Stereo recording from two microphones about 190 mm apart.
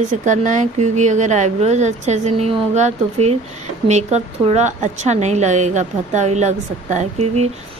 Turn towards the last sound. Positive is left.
turn(degrees=-35)  # may be behind; listen again after turning